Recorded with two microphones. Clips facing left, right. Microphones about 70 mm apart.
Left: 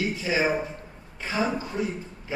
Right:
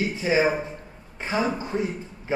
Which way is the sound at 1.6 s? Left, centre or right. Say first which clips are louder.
Right 2 dB; right.